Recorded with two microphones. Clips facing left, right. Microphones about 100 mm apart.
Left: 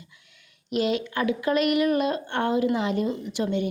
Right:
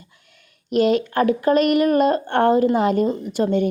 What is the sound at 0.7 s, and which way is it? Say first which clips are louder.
A woman's voice: right 7 dB; 45° right (ahead or behind).